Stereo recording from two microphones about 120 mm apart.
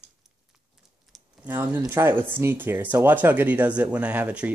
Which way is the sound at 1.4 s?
15° right (ahead or behind).